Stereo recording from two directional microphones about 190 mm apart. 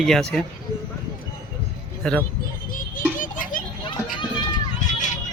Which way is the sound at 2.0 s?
5° left (ahead or behind).